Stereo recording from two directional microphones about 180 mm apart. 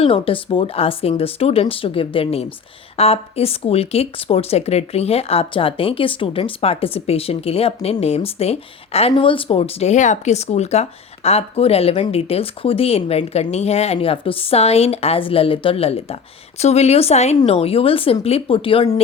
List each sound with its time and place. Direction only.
0.0 s speech: 30° left (ahead or behind)